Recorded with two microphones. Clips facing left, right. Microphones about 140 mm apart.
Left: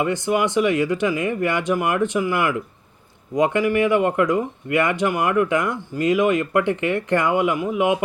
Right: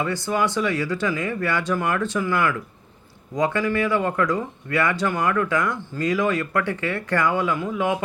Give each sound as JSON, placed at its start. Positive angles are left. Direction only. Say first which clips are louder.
{"t": 0.0, "sound": "speech", "louder": "left 3 dB", "side_deg": 15}